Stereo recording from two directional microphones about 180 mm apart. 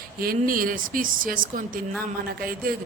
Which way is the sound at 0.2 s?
55° right (ahead or behind).